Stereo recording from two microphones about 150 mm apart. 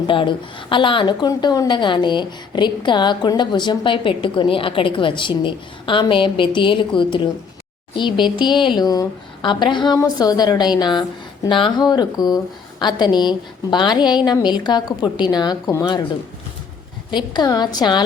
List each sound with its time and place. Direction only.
0.1 s a woman's voice: 35° left (ahead or behind)
17.1 s a woman's voice: 30° left (ahead or behind)